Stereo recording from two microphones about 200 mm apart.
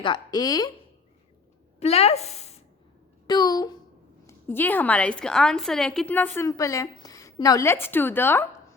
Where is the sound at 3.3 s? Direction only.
20° left (ahead or behind).